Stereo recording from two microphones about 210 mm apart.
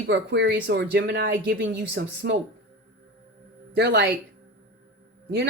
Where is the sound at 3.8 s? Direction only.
50° right (ahead or behind).